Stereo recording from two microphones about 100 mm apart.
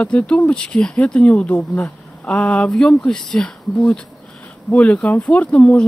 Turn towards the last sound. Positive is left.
turn(degrees=15)  # may be behind; listen again after turning